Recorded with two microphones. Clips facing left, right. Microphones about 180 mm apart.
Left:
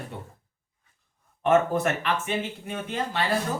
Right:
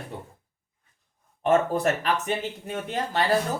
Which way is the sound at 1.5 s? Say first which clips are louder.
Even; 35° right (ahead or behind).